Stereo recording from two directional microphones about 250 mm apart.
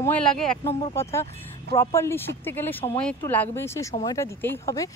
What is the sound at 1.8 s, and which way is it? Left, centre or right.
Speech, centre.